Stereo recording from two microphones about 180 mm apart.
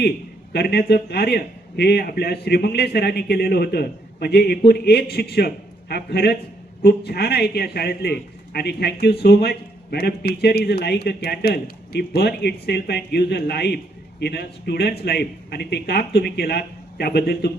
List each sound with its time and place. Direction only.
0.5 s a man's voice: 60° left (ahead or behind)